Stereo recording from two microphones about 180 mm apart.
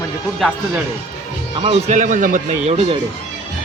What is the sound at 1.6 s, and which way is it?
A man's voice, 35° right (ahead or behind).